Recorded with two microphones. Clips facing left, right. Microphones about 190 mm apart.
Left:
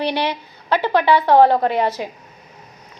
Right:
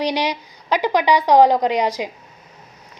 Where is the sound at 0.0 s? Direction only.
15° right (ahead or behind).